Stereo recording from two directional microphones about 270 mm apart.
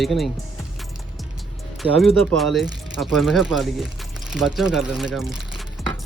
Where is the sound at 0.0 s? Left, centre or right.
Centre.